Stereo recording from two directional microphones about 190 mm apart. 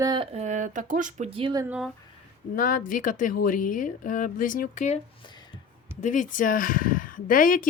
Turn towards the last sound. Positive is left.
turn(degrees=45)  # may be behind; listen again after turning